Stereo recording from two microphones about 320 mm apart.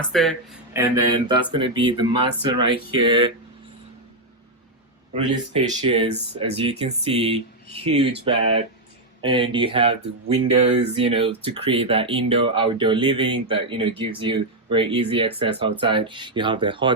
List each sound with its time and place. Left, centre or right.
0.1 s speech: centre
5.8 s speech: centre